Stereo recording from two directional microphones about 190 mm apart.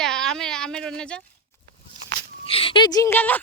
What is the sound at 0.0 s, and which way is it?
Speech, 5° left (ahead or behind).